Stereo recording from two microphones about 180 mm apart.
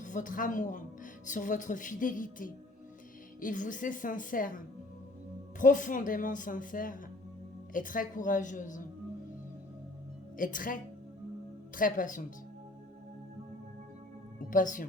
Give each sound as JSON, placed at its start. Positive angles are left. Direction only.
{"t": 0.0, "sound": "a woman's voice", "side_deg": 45}
{"t": 10.3, "sound": "speech", "side_deg": 50}
{"t": 11.8, "sound": "speech", "side_deg": 50}
{"t": 14.5, "sound": "speech", "side_deg": 45}